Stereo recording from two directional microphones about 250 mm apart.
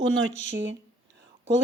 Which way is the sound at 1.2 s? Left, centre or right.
Right.